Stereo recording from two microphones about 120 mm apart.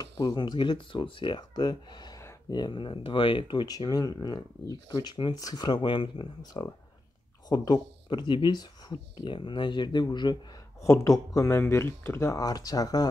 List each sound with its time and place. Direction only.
0.0 s speech: 35° left (ahead or behind)
10.8 s speech: 25° left (ahead or behind)